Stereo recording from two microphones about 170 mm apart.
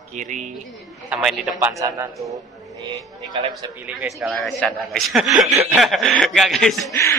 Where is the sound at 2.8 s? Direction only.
25° right (ahead or behind).